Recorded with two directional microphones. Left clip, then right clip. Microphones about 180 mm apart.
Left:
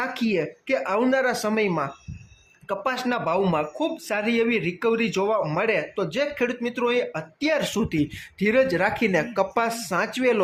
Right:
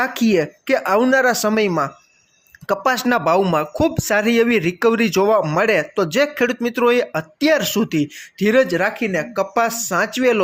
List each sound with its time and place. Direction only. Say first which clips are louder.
0.0 s speech: right 7 dB; 30° right (ahead or behind)
9.0 s speech: right 2 dB; 5° right (ahead or behind)